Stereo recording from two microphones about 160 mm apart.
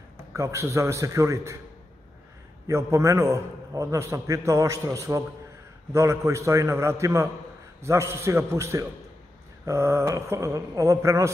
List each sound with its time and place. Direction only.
0.3 s a man's voice: 20° right (ahead or behind)
2.6 s a man's voice: 20° right (ahead or behind)